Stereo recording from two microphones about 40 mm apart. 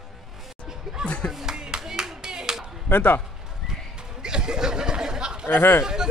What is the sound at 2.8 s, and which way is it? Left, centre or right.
Speech, left.